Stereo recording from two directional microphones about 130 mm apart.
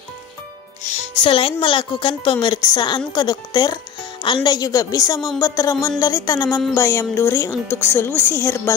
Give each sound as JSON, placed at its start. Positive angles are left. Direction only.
{"t": 1.1, "sound": "a woman's voice", "side_deg": 45}